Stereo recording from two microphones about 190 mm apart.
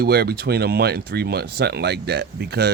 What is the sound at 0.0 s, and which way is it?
Speech, 55° right (ahead or behind).